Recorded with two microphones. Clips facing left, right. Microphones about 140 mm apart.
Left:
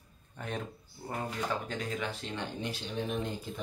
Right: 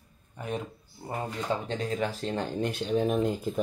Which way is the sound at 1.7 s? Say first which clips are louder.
Right 6 dB; 35° right (ahead or behind).